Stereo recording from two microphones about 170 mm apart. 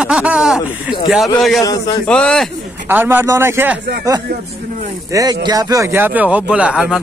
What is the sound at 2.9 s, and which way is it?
Speech, 10° right (ahead or behind).